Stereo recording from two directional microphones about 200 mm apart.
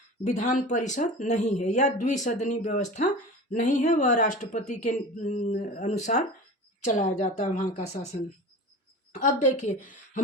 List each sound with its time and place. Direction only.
0.3 s speech: 35° left (ahead or behind)
9.1 s speech: 40° left (ahead or behind)